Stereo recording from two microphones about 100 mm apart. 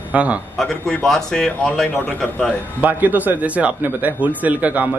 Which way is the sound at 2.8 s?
15° right (ahead or behind).